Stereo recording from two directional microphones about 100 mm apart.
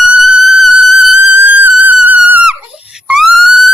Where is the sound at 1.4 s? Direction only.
20° right (ahead or behind).